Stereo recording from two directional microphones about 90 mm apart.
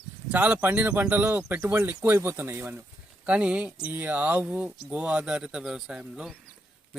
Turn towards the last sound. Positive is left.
turn(degrees=-5)  # may be behind; listen again after turning